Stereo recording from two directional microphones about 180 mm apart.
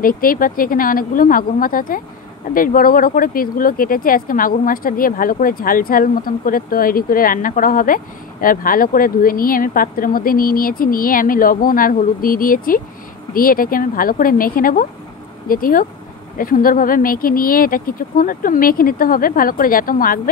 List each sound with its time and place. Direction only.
0.0 s speech: 50° left (ahead or behind)